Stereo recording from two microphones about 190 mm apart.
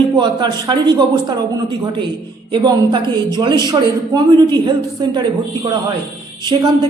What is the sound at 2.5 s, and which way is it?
A woman's voice, 25° right (ahead or behind).